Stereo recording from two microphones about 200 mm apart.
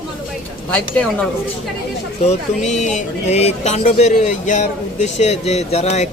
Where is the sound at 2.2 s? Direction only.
35° left (ahead or behind).